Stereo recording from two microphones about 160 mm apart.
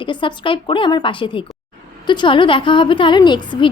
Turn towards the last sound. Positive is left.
turn(degrees=30)  # may be behind; listen again after turning